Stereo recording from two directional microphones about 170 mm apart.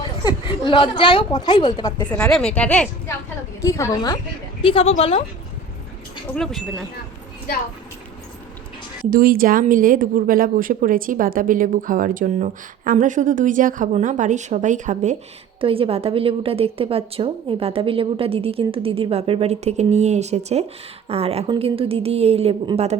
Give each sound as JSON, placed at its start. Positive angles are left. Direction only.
{"t": 0.3, "sound": "a woman's voice", "side_deg": 25}
{"t": 2.0, "sound": "speech", "side_deg": 5}
{"t": 3.6, "sound": "a woman's voice", "side_deg": 15}
{"t": 4.6, "sound": "speech", "side_deg": 30}
{"t": 6.3, "sound": "speech", "side_deg": 0}
{"t": 9.0, "sound": "speech", "side_deg": -55}
{"t": 15.6, "sound": "a woman's voice", "side_deg": -35}